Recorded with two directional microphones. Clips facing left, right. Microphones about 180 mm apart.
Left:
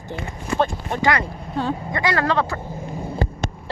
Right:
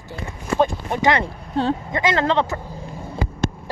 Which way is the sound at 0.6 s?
20° right (ahead or behind).